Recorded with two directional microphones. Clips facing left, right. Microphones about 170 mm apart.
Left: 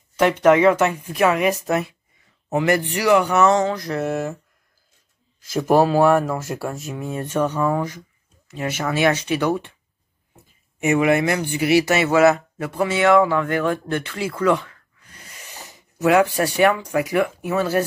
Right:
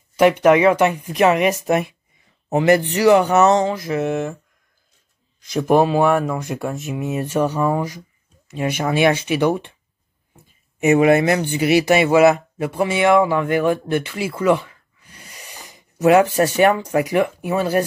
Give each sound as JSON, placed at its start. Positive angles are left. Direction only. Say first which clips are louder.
{"t": 0.1, "sound": "speech", "louder": "right 2 dB", "side_deg": -10}
{"t": 3.7, "sound": "speech", "louder": "right 2 dB", "side_deg": -5}
{"t": 5.5, "sound": "speech", "louder": "right 1 dB", "side_deg": 0}
{"t": 10.8, "sound": "speech", "louder": "right 4 dB", "side_deg": -25}
{"t": 16.0, "sound": "speech", "louder": "right 3 dB", "side_deg": -25}